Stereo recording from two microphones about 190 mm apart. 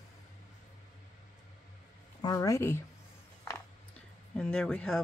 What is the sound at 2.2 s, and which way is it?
Speech, 20° left (ahead or behind).